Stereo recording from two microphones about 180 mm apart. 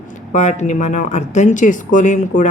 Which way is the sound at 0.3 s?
40° left (ahead or behind).